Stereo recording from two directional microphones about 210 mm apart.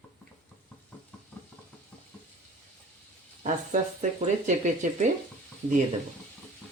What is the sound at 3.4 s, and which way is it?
Speech, 35° right (ahead or behind).